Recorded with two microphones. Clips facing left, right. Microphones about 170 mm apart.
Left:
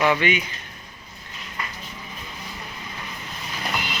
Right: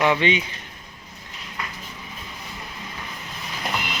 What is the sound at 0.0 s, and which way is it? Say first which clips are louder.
Speech: right 1 dB; 25° right (ahead or behind).